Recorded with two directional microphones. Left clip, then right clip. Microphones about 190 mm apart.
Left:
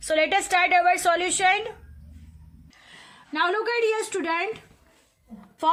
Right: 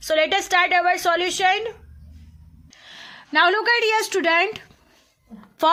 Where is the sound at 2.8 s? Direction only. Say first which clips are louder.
Right 7 dB; 45° right (ahead or behind).